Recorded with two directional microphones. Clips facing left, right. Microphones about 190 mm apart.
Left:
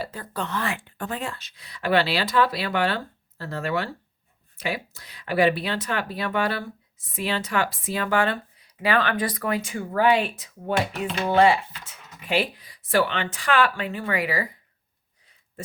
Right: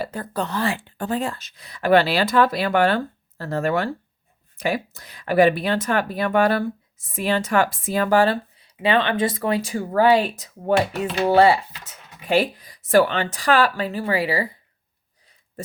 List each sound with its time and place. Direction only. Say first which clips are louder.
0.0 s speech: right 5 dB; 50° right (ahead or behind); by 14.5 s 30° right (ahead or behind)
15.6 s oink: right 4 dB; 40° right (ahead or behind)